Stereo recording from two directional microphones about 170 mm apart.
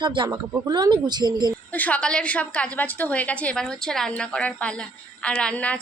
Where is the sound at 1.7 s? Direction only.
10° left (ahead or behind).